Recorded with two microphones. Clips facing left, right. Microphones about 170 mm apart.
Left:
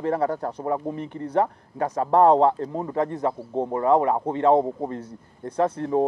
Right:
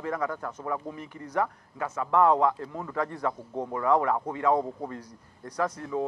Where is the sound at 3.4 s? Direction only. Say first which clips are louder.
Left 7 dB; 35° left (ahead or behind).